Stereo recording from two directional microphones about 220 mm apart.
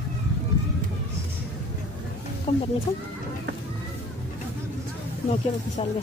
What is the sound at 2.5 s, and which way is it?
Speech, 25° left (ahead or behind).